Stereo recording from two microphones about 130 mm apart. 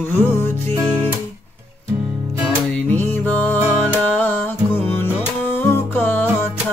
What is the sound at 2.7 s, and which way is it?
Music, 10° left (ahead or behind).